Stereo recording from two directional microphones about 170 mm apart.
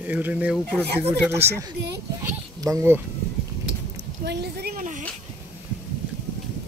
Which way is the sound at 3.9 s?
75° right (ahead or behind).